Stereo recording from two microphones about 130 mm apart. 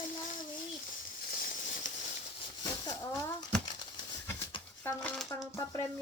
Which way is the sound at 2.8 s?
20° left (ahead or behind).